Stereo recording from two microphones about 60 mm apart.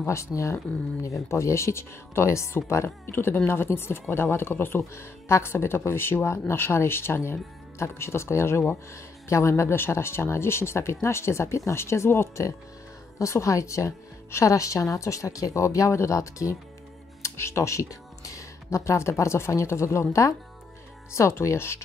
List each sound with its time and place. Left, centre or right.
0.0 s a woman's voice: left
17.2 s speech: left